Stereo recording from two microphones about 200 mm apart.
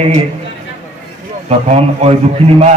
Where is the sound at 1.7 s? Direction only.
30° right (ahead or behind).